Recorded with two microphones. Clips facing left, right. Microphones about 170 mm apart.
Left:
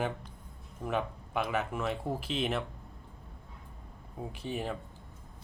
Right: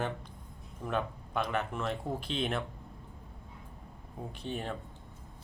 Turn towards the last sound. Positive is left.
turn(degrees=5)  # may be behind; listen again after turning